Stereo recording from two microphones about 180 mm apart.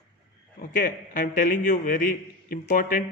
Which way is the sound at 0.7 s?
50° left (ahead or behind).